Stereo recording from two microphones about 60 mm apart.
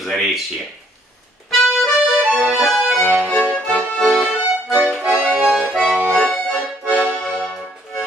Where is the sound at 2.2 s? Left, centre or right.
Centre.